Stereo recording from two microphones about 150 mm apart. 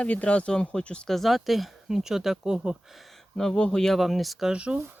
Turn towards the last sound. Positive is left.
turn(degrees=-5)  # may be behind; listen again after turning